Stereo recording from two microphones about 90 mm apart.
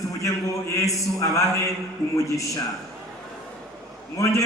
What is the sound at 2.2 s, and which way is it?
Speech, 35° left (ahead or behind).